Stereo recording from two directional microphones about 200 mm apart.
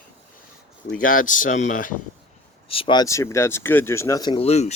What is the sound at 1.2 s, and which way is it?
Speech, 40° left (ahead or behind).